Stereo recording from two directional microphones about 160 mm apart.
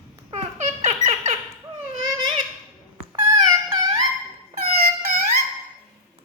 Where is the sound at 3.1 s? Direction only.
25° right (ahead or behind).